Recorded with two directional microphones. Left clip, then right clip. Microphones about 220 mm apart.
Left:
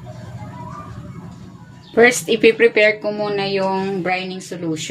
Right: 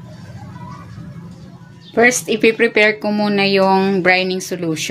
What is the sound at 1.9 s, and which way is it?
Speech, 5° right (ahead or behind).